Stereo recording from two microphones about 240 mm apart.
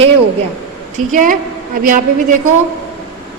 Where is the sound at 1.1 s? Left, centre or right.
Right.